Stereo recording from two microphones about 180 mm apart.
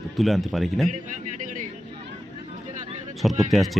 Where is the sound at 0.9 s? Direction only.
45° right (ahead or behind).